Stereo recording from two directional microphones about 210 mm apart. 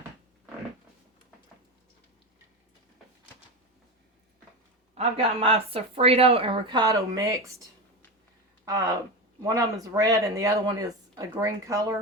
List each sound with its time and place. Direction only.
4.9 s speech: 25° right (ahead or behind)
8.6 s speech: 15° right (ahead or behind)